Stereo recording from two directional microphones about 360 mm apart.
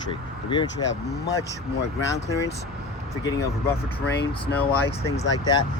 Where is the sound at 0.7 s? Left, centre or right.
Left.